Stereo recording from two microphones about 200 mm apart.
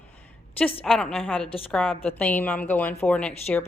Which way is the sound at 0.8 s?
Centre (ahead or behind).